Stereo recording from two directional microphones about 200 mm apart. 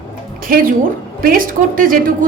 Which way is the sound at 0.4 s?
45° right (ahead or behind).